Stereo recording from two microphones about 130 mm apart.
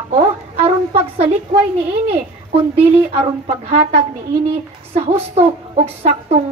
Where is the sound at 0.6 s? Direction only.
50° right (ahead or behind).